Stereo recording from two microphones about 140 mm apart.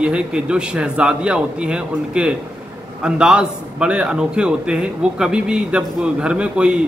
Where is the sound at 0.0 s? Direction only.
5° right (ahead or behind).